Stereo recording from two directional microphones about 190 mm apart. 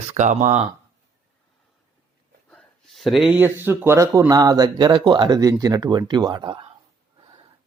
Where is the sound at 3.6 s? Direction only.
10° right (ahead or behind).